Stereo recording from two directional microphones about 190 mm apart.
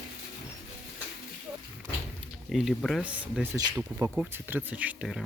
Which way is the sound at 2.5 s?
Centre (ahead or behind).